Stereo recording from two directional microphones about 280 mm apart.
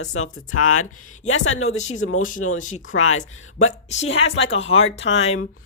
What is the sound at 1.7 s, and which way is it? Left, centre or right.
Speech, left.